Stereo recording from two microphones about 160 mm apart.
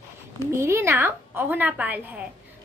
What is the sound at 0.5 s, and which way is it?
A woman's voice, 15° right (ahead or behind).